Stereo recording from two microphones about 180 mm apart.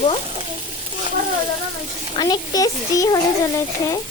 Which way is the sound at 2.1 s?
25° left (ahead or behind).